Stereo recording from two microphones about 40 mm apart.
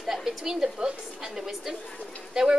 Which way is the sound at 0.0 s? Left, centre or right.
Centre.